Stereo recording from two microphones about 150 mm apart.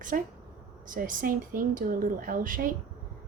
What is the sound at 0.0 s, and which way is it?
A woman's voice, 60° right (ahead or behind).